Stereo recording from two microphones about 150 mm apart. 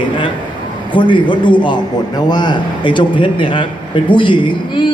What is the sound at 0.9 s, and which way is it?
A man's voice, 30° left (ahead or behind).